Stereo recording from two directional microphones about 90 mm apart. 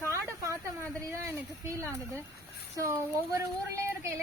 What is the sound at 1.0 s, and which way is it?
Speech, 30° right (ahead or behind).